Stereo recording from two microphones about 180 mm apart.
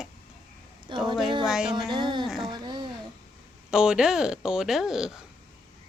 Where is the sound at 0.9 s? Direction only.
25° right (ahead or behind).